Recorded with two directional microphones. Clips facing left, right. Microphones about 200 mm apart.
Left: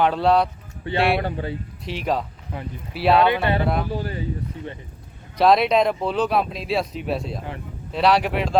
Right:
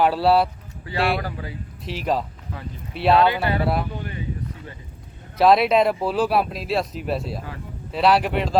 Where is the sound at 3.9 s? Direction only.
35° left (ahead or behind).